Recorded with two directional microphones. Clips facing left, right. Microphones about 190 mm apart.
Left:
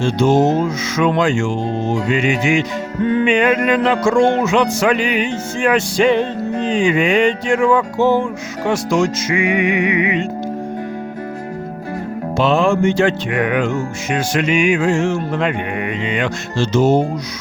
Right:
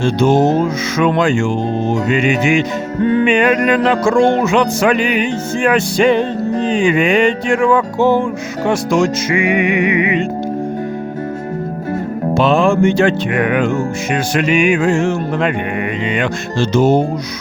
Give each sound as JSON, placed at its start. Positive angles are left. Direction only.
{"t": 0.0, "sound": "music", "side_deg": -55}
{"t": 12.3, "sound": "music", "side_deg": -50}